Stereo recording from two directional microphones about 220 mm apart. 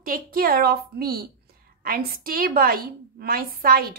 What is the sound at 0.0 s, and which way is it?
A woman's voice, 40° right (ahead or behind).